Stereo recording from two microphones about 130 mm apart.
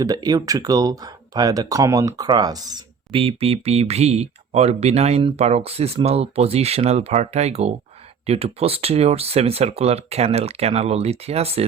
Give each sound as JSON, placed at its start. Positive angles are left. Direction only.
{"t": 0.0, "sound": "speech", "side_deg": -30}
{"t": 3.1, "sound": "speech", "side_deg": -45}